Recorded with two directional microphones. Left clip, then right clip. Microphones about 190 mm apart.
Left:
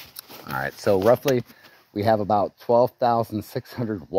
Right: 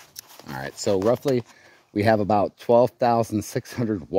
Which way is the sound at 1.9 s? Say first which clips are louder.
Right 1 dB; 45° right (ahead or behind).